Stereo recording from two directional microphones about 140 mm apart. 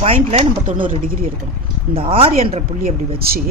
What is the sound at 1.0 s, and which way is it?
Speech, 90° right.